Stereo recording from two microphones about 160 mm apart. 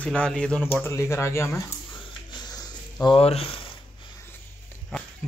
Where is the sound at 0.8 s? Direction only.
15° left (ahead or behind).